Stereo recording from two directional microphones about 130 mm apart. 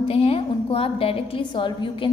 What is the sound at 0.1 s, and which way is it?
A woman's voice, 45° left (ahead or behind).